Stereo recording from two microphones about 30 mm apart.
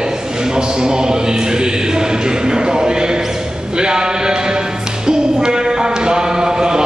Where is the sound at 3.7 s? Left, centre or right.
Right.